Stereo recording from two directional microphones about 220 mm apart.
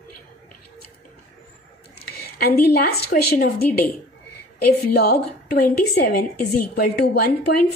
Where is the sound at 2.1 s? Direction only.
45° left (ahead or behind).